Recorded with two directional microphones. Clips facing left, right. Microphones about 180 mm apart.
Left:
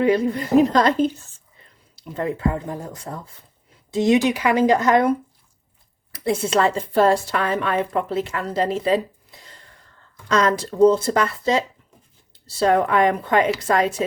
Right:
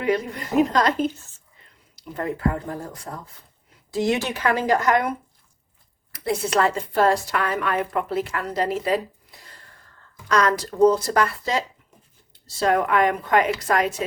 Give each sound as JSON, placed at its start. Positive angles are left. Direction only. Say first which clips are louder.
{"t": 0.0, "sound": "a woman's voice", "louder": "left 5 dB", "side_deg": 30}
{"t": 2.0, "sound": "a woman's voice", "louder": "left 2 dB", "side_deg": 25}
{"t": 10.2, "sound": "a woman's voice", "louder": "left 2 dB", "side_deg": 25}
{"t": 12.6, "sound": "a woman's voice", "louder": "left 2 dB", "side_deg": 30}